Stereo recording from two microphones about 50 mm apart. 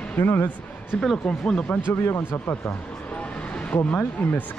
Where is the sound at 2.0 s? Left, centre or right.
Left.